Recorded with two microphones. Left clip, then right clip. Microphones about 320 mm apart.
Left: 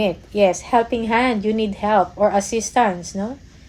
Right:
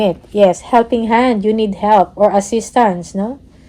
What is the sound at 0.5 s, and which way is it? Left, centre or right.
A woman's voice, right.